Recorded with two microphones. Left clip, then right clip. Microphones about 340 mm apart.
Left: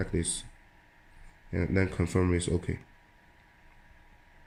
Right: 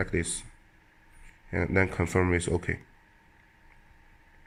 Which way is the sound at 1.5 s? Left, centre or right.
Right.